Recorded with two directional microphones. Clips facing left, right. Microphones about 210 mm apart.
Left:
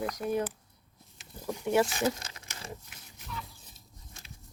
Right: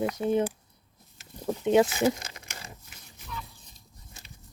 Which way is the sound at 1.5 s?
20° right (ahead or behind).